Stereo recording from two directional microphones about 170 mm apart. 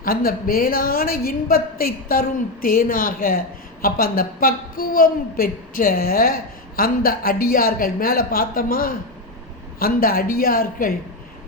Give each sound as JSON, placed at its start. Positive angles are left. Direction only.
{"t": 0.0, "sound": "a woman's voice", "side_deg": 60}